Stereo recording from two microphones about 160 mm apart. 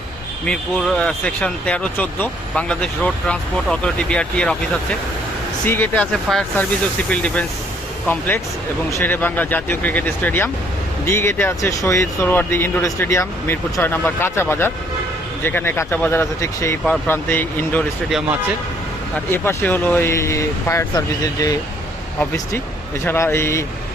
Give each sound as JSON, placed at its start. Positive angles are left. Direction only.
{"t": 0.4, "sound": "speech", "side_deg": 5}
{"t": 19.3, "sound": "speech", "side_deg": 10}
{"t": 23.0, "sound": "speech", "side_deg": 15}